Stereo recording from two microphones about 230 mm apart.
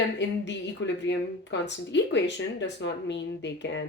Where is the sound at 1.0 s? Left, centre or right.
Left.